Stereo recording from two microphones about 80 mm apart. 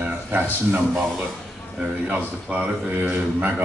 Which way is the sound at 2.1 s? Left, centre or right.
Centre.